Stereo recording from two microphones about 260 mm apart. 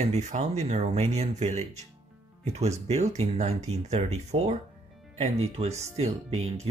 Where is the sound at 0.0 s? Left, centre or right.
Right.